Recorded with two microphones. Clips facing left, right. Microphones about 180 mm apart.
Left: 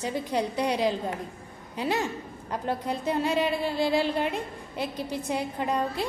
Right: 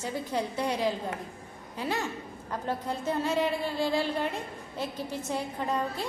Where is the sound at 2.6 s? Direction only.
15° left (ahead or behind).